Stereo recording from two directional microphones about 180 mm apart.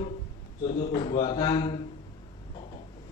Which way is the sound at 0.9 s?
25° left (ahead or behind).